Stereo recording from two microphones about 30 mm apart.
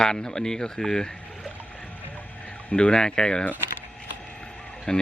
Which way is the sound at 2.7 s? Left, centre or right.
Left.